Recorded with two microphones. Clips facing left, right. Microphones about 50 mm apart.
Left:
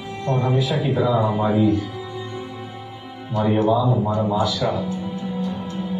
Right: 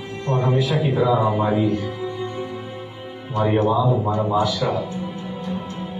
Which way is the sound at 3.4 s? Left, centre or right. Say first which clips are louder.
Even; right.